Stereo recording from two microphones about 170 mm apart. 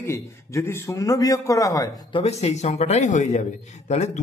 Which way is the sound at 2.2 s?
40° left (ahead or behind).